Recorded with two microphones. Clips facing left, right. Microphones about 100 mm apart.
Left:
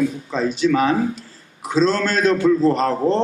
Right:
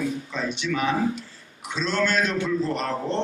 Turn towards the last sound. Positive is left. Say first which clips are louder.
# left 8 dB
turn(degrees=40)  # may be behind; listen again after turning